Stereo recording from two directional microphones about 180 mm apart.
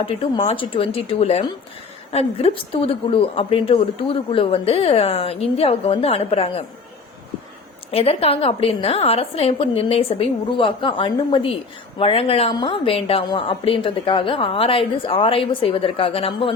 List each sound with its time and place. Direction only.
0.0 s a woman's voice: 30° left (ahead or behind)
7.9 s a woman's voice: 35° left (ahead or behind)